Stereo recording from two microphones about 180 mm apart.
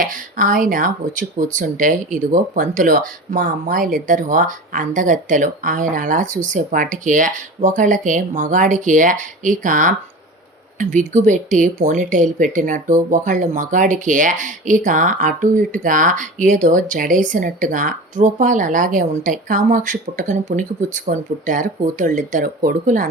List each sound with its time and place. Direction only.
0.0 s speech: 50° right (ahead or behind)